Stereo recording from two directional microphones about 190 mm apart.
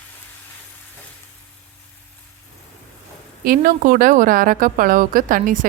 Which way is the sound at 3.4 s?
50° right (ahead or behind).